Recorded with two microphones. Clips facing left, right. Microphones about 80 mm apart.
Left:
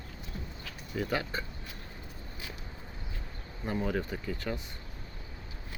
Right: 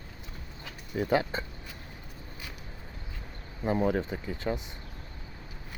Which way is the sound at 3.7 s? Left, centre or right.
Right.